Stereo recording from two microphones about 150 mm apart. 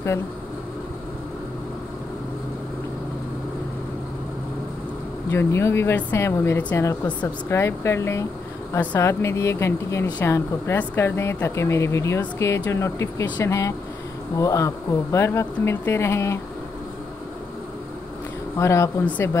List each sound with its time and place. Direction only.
5.3 s speech: 15° left (ahead or behind)
18.6 s speech: 20° left (ahead or behind)